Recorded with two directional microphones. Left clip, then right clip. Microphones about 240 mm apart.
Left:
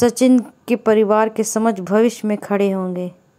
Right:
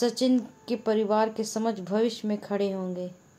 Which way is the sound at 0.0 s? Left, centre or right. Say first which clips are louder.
Left 11 dB; left.